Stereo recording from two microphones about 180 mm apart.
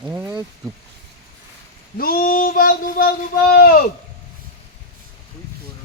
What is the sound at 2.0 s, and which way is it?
Female singing, 55° left (ahead or behind).